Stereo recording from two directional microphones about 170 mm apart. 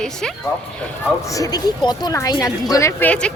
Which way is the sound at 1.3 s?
20° left (ahead or behind).